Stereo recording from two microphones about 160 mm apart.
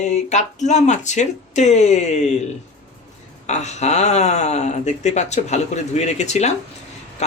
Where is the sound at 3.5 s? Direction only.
45° left (ahead or behind).